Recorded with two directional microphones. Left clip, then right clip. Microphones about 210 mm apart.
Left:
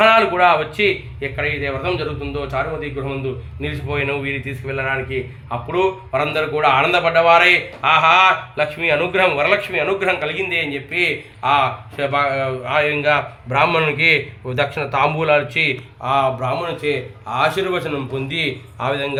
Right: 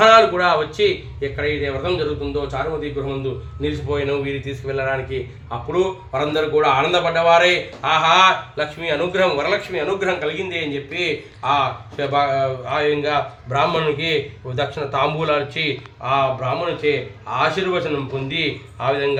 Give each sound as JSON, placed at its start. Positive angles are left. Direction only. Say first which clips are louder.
{"t": 0.0, "sound": "a man's voice", "louder": "even", "side_deg": 30}